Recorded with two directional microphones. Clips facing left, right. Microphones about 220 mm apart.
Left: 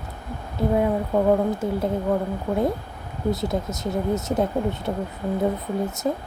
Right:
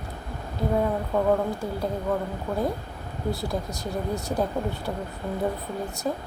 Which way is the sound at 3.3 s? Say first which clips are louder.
Left 5 dB; 20° left (ahead or behind).